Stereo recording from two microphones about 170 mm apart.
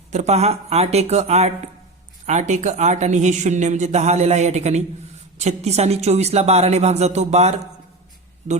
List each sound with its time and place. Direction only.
0.1 s a woman's voice: 40° right (ahead or behind)